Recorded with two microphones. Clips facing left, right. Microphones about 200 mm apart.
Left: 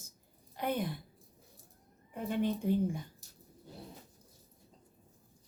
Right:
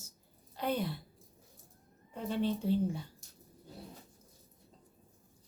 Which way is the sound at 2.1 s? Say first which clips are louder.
Even; 15° left (ahead or behind).